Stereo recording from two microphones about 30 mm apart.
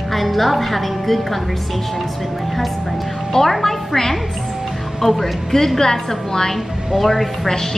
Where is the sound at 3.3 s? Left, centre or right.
Centre.